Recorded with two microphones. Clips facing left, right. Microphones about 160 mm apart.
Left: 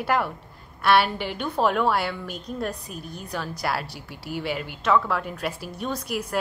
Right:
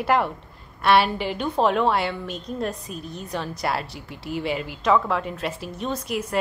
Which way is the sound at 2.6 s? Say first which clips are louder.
Right 1 dB; 10° left (ahead or behind).